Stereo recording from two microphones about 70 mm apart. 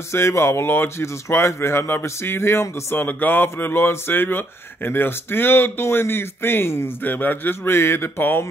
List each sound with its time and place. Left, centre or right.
0.1 s speech: left
3.1 s speech: left